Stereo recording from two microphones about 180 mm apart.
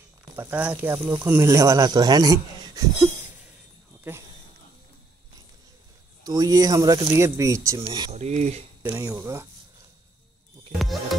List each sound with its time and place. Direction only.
0.2 s speech: 10° right (ahead or behind)
6.2 s speech: 20° right (ahead or behind)
8.1 s mechanisms: 40° right (ahead or behind)
9.0 s speech: 15° right (ahead or behind)